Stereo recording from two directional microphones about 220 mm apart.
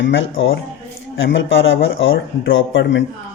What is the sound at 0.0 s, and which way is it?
Speech, 55° left (ahead or behind).